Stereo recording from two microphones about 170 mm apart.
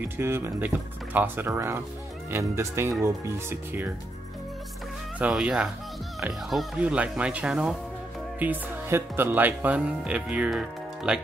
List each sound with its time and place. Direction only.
0.0 s speech: 15° right (ahead or behind)
5.2 s speech: 5° right (ahead or behind)